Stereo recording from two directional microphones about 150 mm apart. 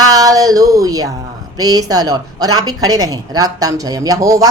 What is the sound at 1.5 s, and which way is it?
Speech, 25° right (ahead or behind).